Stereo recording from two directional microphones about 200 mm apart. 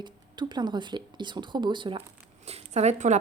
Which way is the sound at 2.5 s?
30° right (ahead or behind).